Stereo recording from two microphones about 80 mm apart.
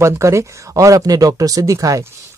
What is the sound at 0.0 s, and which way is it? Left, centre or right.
Speech, right.